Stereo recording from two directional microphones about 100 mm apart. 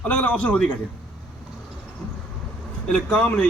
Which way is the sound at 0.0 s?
15° left (ahead or behind).